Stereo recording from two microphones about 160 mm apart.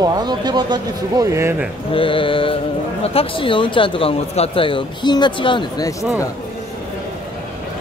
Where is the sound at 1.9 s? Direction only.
35° left (ahead or behind).